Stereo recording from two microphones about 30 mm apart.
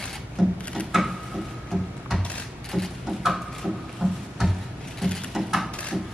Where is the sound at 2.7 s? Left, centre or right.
Right.